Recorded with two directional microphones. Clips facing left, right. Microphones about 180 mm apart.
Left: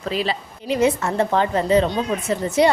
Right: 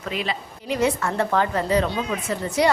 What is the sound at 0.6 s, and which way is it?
A woman's voice, 20° left (ahead or behind).